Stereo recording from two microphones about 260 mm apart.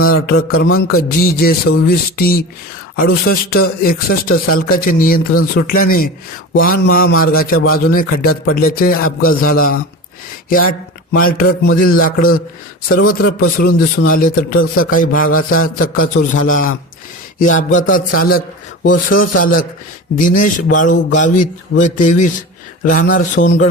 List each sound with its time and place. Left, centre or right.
0.0 s speech: left
11.1 s a man's voice: left